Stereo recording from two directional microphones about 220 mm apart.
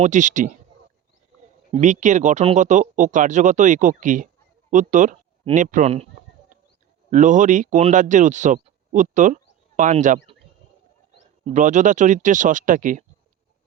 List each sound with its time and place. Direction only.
0.0 s speech: 35° right (ahead or behind)
1.7 s speech: 35° right (ahead or behind)
7.1 s speech: 35° right (ahead or behind)
11.4 s speech: 35° right (ahead or behind)